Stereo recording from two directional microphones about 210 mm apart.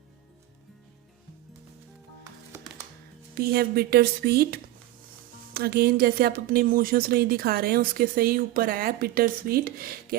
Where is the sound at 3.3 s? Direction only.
45° right (ahead or behind).